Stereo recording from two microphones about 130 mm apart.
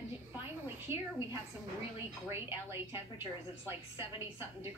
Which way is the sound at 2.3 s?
20° right (ahead or behind).